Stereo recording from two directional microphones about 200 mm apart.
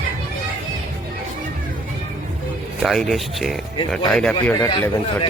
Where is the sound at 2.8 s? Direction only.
Centre (ahead or behind).